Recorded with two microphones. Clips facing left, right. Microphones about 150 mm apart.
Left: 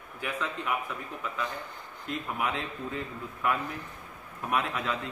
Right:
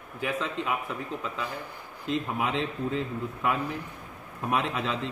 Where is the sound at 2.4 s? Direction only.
20° right (ahead or behind).